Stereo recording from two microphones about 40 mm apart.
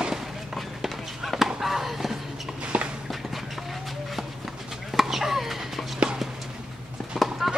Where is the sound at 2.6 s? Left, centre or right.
Right.